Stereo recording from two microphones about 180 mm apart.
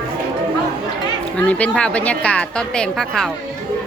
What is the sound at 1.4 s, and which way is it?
A woman's voice, 5° left (ahead or behind).